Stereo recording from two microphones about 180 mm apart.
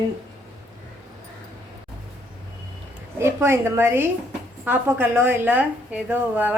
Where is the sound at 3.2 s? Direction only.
15° right (ahead or behind).